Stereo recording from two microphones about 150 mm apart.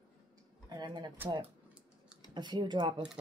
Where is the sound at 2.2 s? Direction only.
30° right (ahead or behind).